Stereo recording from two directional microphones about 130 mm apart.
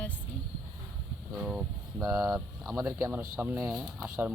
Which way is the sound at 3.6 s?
5° right (ahead or behind).